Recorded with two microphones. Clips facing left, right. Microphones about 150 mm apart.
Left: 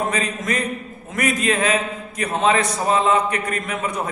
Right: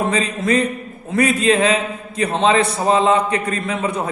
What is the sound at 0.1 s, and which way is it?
A man's voice, 30° right (ahead or behind).